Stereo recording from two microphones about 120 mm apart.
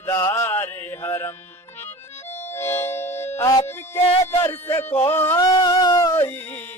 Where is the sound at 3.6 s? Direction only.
20° left (ahead or behind).